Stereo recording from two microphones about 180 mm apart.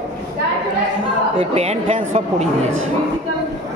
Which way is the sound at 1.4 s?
35° right (ahead or behind).